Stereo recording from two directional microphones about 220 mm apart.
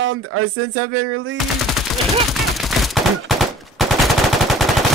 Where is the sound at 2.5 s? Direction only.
Centre (ahead or behind).